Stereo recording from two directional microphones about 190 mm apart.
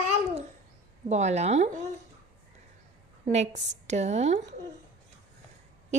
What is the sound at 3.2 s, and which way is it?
A woman's voice, 35° right (ahead or behind).